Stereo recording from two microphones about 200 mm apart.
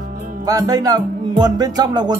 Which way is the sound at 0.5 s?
20° right (ahead or behind).